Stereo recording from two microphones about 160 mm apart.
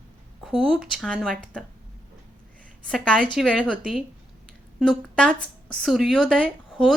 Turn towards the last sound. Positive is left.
turn(degrees=0)  # may be behind; listen again after turning